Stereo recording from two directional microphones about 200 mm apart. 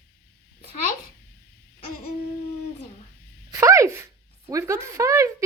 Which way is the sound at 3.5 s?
15° right (ahead or behind).